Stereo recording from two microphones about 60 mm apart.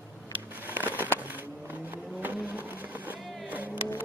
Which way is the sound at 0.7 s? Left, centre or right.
Right.